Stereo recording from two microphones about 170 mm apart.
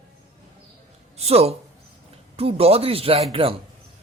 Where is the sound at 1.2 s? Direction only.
40° right (ahead or behind).